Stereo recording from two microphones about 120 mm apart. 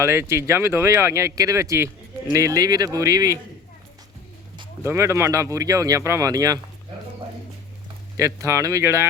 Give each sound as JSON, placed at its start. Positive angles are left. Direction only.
{"t": 0.0, "sound": "speech", "side_deg": -20}
{"t": 4.9, "sound": "speech", "side_deg": -20}
{"t": 8.1, "sound": "speech", "side_deg": -25}